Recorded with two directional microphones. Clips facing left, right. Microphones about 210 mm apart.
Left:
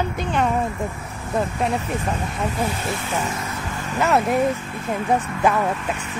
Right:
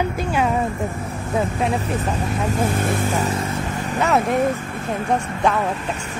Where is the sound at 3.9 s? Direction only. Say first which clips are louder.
Even; centre (ahead or behind).